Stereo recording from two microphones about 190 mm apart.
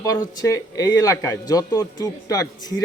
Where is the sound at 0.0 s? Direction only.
20° left (ahead or behind).